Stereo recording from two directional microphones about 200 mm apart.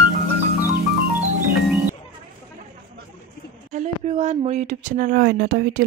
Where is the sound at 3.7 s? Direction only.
35° right (ahead or behind).